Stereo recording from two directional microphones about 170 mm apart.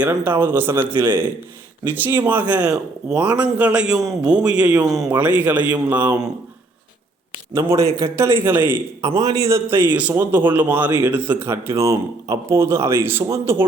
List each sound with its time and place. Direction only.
0.0 s a man's voice: 10° right (ahead or behind)
4.8 s speech: 20° right (ahead or behind)
5.0 s speech: 10° right (ahead or behind)
7.5 s speech: 20° right (ahead or behind)